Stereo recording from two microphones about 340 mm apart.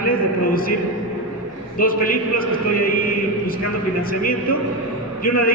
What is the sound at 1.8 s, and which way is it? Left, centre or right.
A man's voice, left.